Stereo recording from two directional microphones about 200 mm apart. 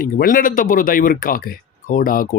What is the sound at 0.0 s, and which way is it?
Speech, 45° left (ahead or behind).